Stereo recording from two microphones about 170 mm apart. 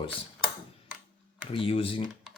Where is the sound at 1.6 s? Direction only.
30° left (ahead or behind).